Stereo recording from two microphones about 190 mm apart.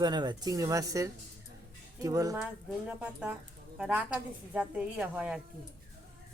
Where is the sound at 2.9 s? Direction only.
5° right (ahead or behind).